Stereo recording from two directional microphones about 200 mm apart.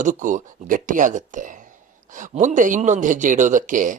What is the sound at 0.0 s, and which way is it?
Speech, 40° right (ahead or behind).